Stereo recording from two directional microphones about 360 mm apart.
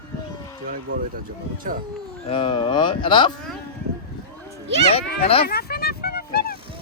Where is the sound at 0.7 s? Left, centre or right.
Right.